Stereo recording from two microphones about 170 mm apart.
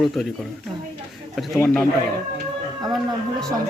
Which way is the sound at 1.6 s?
5° left (ahead or behind).